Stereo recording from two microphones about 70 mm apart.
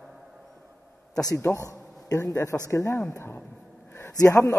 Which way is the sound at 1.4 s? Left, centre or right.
Left.